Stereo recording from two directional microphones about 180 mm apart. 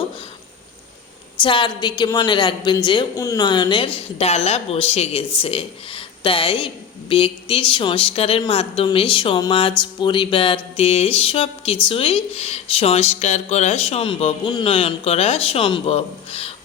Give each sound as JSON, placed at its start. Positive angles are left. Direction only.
{"t": 1.4, "sound": "a woman's voice", "side_deg": 25}